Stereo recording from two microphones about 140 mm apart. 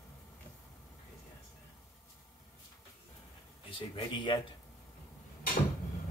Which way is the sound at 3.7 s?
35° left (ahead or behind).